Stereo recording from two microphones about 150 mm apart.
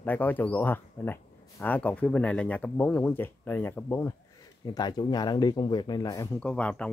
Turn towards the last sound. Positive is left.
turn(degrees=10)  # may be behind; listen again after turning